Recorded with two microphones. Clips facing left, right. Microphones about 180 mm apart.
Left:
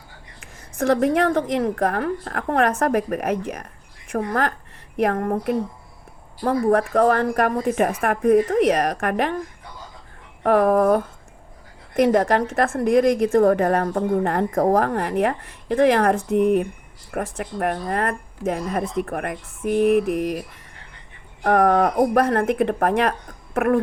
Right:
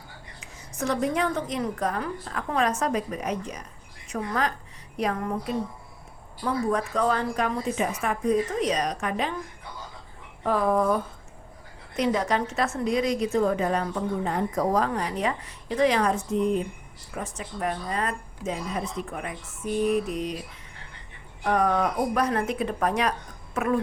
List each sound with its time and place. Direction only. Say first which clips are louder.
0.6 s a woman's voice: left 7 dB; 55° left (ahead or behind)
10.4 s a woman's voice: left 7 dB; 70° left (ahead or behind)
21.4 s a woman's voice: left 6 dB; 55° left (ahead or behind)